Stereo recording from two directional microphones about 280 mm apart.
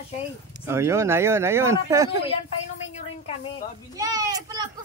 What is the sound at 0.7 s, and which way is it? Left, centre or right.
Speech, centre.